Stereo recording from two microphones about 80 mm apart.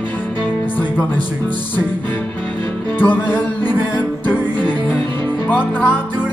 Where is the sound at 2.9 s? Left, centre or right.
Left.